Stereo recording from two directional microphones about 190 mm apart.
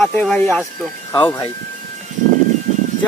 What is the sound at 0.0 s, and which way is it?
Speech, 5° left (ahead or behind).